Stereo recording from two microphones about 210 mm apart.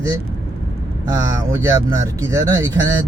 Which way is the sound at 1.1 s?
15° right (ahead or behind).